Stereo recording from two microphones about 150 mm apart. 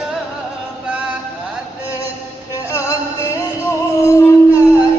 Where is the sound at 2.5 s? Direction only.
20° left (ahead or behind).